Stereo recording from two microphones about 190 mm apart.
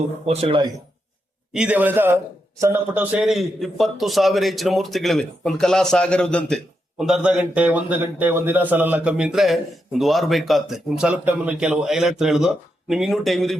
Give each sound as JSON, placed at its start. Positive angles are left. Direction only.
{"t": 0.3, "sound": "speech", "side_deg": -30}
{"t": 1.5, "sound": "a man's voice", "side_deg": -5}